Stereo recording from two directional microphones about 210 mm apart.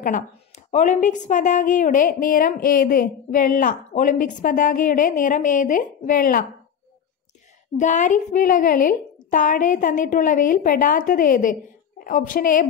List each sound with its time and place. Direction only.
0.7 s a woman's voice: 35° left (ahead or behind)
7.8 s a woman's voice: 35° left (ahead or behind)